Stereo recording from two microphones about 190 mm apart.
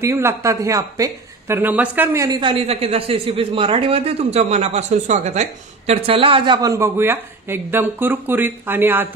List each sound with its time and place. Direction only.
0.0 s speech: 15° right (ahead or behind)
2.2 s a man's voice: 30° right (ahead or behind); by 9.1 s 10° right (ahead or behind)